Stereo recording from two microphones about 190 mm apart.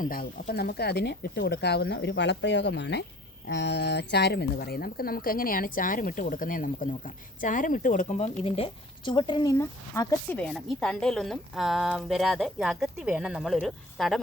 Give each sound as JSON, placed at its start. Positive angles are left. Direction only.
{"t": 0.0, "sound": "speech", "side_deg": 45}